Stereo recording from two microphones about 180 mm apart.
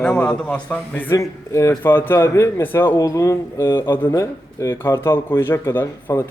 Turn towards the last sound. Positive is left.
turn(degrees=10)  # may be behind; listen again after turning